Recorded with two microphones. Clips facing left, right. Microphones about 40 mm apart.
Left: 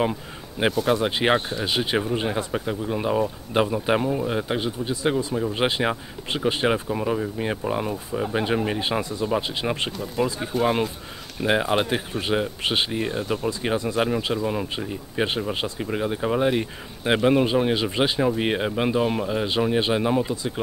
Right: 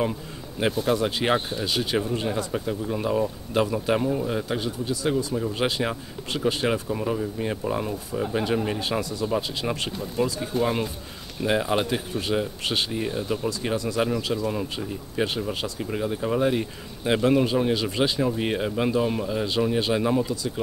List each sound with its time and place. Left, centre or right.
0.8 s speech: left